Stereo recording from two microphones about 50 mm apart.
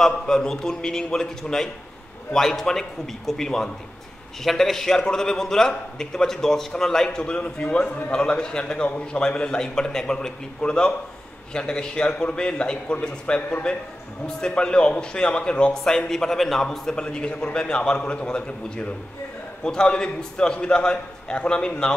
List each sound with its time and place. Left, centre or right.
0.0 s a man's voice: centre
13.4 s a man's voice: left
16.1 s a man's voice: centre